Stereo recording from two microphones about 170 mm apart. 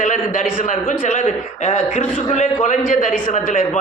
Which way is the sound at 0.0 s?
50° left (ahead or behind).